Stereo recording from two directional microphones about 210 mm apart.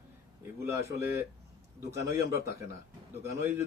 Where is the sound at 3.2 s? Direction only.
10° right (ahead or behind).